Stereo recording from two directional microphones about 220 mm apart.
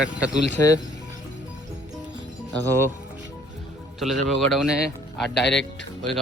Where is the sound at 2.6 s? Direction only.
10° left (ahead or behind).